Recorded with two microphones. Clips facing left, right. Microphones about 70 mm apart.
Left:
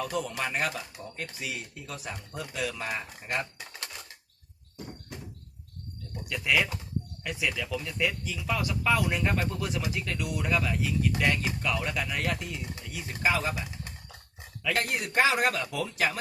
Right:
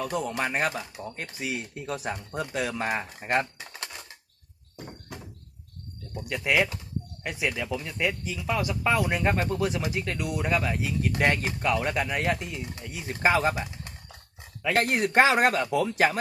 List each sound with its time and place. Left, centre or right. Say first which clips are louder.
0.0 s speech: right 3 dB; right
3.6 s a sound: right 2 dB; centre
6.2 s speech: right 2 dB; right
7.7 s speech: right 2 dB; centre
10.6 s speech: right 1 dB; right
13.2 s speech: right 5 dB; right
14.8 s speech: right 5 dB; right